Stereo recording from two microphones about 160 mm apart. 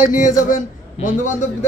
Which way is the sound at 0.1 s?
55° left (ahead or behind).